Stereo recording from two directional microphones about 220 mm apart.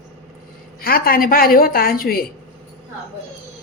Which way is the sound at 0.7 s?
40° left (ahead or behind).